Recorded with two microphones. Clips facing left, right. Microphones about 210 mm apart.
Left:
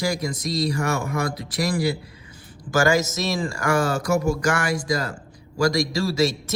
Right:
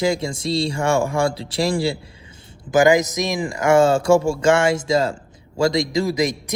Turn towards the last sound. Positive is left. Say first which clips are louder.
# right 1 dB
turn(degrees=-15)  # may be behind; listen again after turning